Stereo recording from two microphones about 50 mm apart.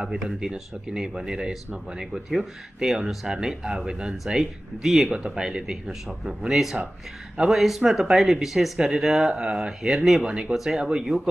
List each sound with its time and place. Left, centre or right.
0.2 s speech: centre